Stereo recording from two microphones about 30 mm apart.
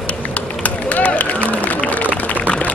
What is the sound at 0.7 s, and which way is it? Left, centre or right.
Run, left.